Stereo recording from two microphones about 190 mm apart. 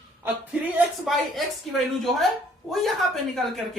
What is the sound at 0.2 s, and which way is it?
Speech, 10° right (ahead or behind).